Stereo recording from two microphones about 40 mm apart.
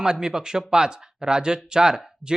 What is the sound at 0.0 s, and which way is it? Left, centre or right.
Speech, centre.